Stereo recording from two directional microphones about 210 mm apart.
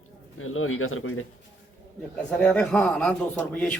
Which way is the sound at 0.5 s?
75° left (ahead or behind).